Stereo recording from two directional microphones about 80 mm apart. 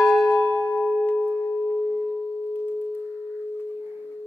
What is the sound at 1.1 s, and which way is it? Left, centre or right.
Singing bowl, centre.